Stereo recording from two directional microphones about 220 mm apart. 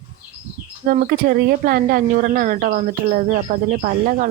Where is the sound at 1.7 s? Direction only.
40° right (ahead or behind).